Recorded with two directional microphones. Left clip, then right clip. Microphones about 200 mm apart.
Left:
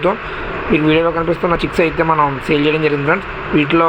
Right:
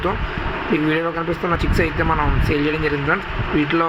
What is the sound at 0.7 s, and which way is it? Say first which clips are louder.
A man's voice: left 7 dB; 10° left (ahead or behind).